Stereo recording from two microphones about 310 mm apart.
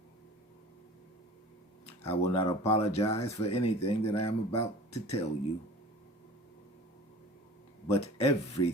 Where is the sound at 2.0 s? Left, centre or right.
Centre.